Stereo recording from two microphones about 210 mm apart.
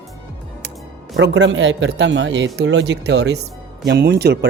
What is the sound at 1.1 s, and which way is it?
A man's voice, 60° right (ahead or behind).